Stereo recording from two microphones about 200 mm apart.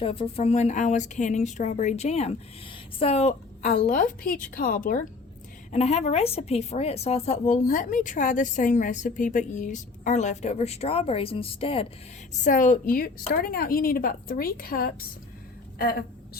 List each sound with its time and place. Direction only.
0.0 s a woman's voice: 30° left (ahead or behind); by 5.0 s 45° left (ahead or behind)
5.7 s a woman's voice: 35° left (ahead or behind)
12.3 s a woman's voice: 40° left (ahead or behind)